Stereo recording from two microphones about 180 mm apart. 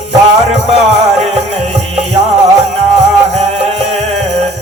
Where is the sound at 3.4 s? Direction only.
35° right (ahead or behind).